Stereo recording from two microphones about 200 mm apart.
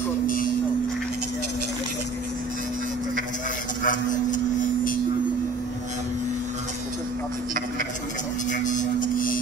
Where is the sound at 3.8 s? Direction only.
40° left (ahead or behind).